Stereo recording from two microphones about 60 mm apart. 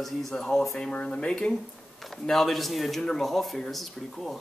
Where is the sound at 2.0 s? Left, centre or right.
Centre.